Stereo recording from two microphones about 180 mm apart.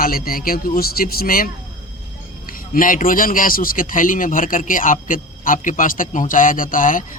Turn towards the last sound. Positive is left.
turn(degrees=50)  # may be behind; listen again after turning